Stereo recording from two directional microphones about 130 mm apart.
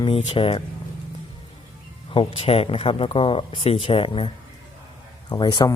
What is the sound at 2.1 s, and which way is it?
Speech, 50° left (ahead or behind).